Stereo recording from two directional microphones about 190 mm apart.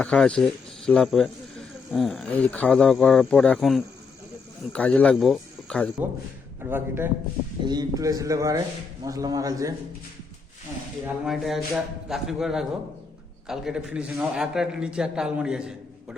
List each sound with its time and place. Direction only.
0.0 s speech: 5° left (ahead or behind)
6.6 s a man's voice: 10° right (ahead or behind)
7.6 s a man's voice: 20° right (ahead or behind)
11.0 s speech: centre (ahead or behind)